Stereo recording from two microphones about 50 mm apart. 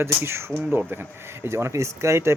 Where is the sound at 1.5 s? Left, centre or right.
Right.